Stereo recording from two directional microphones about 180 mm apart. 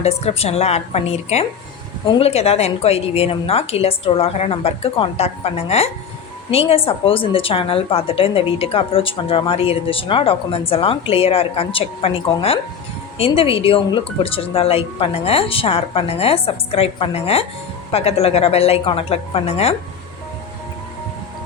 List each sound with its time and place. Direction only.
0.0 s a woman's voice: 35° left (ahead or behind)